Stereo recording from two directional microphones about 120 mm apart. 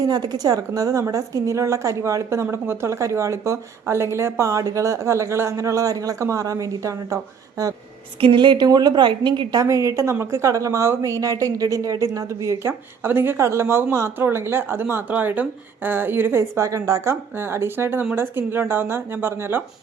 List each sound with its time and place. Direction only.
0.0 s a woman's voice: 35° right (ahead or behind)
8.2 s a woman's voice: 45° right (ahead or behind)
9.6 s a woman's voice: 25° right (ahead or behind)